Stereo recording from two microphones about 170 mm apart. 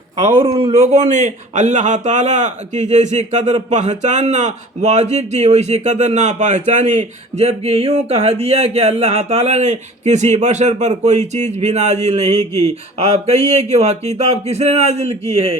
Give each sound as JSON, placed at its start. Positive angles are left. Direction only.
{"t": 0.2, "sound": "a man's voice", "side_deg": -35}